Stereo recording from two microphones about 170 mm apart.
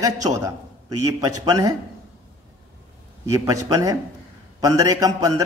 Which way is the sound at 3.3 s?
20° right (ahead or behind).